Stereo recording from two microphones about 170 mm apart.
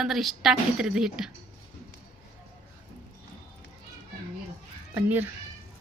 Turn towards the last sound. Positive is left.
turn(degrees=-10)  # may be behind; listen again after turning